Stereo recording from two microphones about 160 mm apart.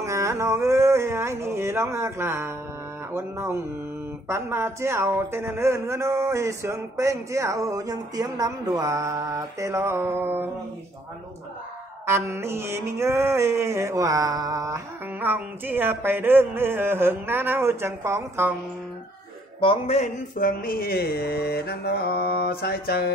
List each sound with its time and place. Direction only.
0.0 s a woman's voice: 20° right (ahead or behind)
12.1 s a woman's voice: 15° right (ahead or behind)
15.1 s a woman's voice: 10° right (ahead or behind)
19.6 s speech: 35° left (ahead or behind)
20.3 s mantra: 60° left (ahead or behind); by 23.1 s 80° left